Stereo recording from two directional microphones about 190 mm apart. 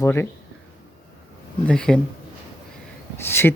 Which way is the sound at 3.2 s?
10° left (ahead or behind).